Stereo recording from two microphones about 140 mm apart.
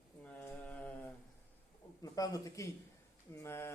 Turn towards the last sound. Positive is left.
turn(degrees=20)  # may be behind; listen again after turning